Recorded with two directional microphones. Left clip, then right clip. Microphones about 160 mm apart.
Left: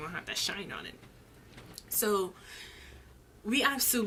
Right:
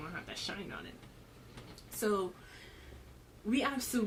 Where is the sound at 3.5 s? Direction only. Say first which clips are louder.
Left 5 dB; 15° left (ahead or behind).